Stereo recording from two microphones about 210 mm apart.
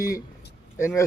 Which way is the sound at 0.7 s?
15° left (ahead or behind).